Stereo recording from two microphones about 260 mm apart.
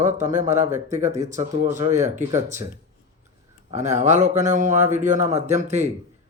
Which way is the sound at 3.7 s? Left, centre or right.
Right.